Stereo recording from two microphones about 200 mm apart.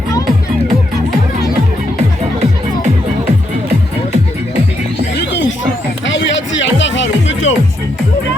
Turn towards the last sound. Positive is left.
turn(degrees=70)  # may be behind; listen again after turning